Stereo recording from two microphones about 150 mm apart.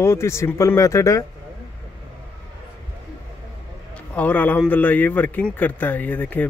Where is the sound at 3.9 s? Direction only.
10° left (ahead or behind).